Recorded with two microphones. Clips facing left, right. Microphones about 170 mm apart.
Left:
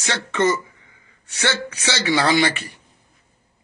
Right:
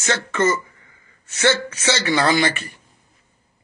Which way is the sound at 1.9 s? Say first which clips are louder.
Left 1 dB; 15° left (ahead or behind).